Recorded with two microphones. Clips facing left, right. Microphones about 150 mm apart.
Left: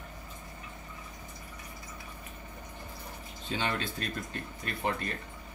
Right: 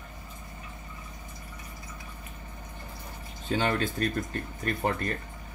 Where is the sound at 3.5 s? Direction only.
45° right (ahead or behind).